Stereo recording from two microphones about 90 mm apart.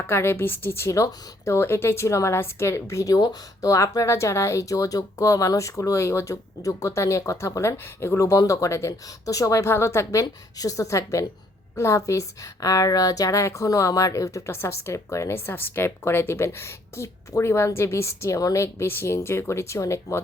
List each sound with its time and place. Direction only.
0.1 s speech: 30° left (ahead or behind)